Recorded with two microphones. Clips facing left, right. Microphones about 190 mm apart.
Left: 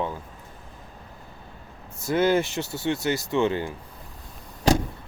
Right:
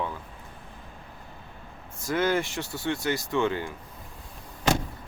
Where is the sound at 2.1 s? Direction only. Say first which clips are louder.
Left 4 dB; 25° left (ahead or behind).